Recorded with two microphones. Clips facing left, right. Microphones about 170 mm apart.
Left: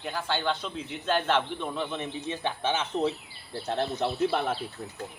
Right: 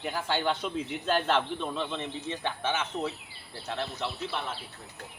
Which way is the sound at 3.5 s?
40° left (ahead or behind).